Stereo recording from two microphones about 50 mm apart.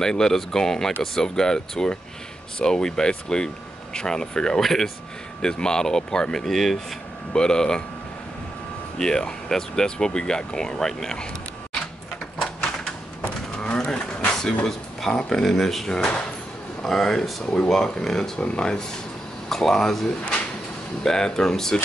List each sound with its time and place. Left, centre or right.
0.0 s speech: centre
4.6 s speech: centre
5.4 s speech: centre
7.3 s speech: centre
8.9 s speech: centre
13.7 s a sound: centre
15.0 s speech: centre